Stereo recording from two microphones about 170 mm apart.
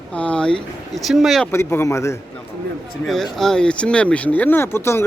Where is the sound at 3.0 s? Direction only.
Centre (ahead or behind).